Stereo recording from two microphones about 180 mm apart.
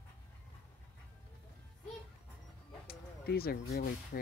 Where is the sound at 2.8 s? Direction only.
60° left (ahead or behind).